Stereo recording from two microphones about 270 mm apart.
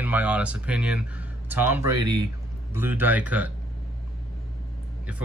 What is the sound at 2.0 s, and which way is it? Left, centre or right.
Speech, right.